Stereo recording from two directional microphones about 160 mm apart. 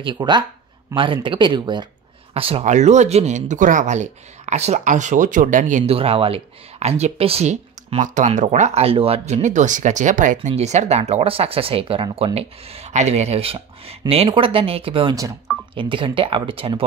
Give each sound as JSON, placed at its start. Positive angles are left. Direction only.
{"t": 0.0, "sound": "speech", "side_deg": -30}